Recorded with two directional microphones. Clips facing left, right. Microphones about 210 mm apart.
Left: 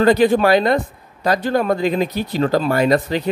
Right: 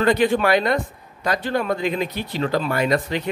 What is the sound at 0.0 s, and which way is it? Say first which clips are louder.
Speech: left 5 dB; 35° left (ahead or behind).